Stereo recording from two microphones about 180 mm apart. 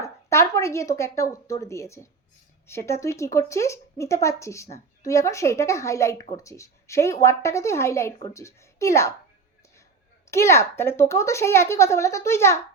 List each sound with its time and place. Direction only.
0.0 s speech: 15° left (ahead or behind)
10.3 s speech: 15° left (ahead or behind)